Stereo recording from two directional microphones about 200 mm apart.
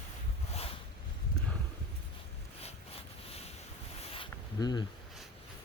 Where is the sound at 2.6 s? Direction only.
30° left (ahead or behind).